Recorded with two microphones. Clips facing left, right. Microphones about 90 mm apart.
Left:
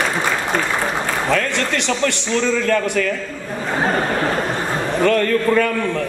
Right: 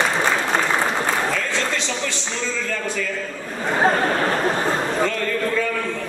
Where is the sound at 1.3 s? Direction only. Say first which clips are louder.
Left 4 dB; 65° left (ahead or behind).